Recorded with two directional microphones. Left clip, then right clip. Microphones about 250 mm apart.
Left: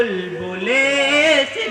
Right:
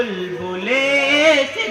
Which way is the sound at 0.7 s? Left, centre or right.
Left.